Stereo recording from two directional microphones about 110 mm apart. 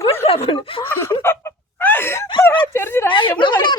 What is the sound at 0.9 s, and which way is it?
Speech, 20° left (ahead or behind).